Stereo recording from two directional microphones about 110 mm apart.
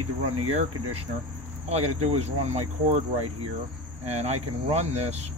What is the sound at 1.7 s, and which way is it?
Speech, 70° right (ahead or behind).